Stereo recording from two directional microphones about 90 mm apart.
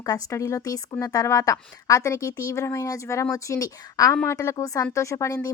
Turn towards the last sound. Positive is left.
turn(degrees=35)  # may be behind; listen again after turning